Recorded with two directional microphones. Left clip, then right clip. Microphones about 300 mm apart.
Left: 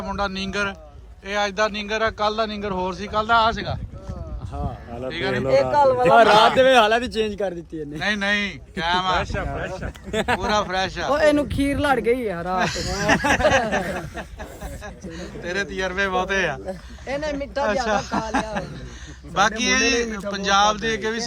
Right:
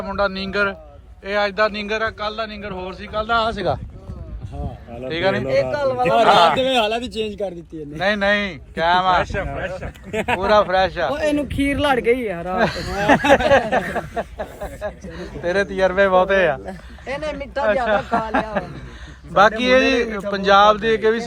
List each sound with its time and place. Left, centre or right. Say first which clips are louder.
0.0 s a man's voice: right 4 dB; centre
5.7 s a man's voice: left 3 dB; left
6.6 s a man's voice: left 3 dB; centre
11.6 s a man's voice: right 5 dB; centre
17.1 s speech: even; right
17.7 s a man's voice: right 6 dB; centre